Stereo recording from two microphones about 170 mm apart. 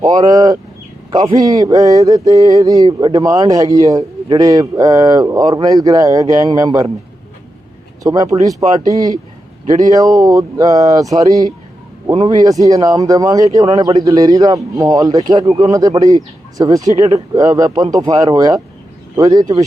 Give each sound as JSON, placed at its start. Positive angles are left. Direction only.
{"t": 0.0, "sound": "speech", "side_deg": -20}
{"t": 8.0, "sound": "speech", "side_deg": -20}